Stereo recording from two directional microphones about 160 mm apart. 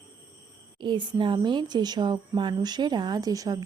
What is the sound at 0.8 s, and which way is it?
Speech, 30° right (ahead or behind).